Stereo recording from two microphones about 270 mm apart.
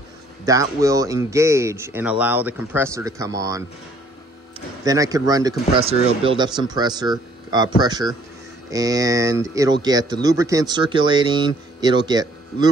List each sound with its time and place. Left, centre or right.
0.5 s speech: centre
4.8 s speech: centre